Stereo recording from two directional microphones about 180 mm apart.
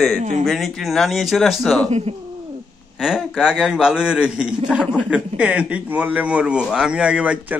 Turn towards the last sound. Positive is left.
turn(degrees=-5)  # may be behind; listen again after turning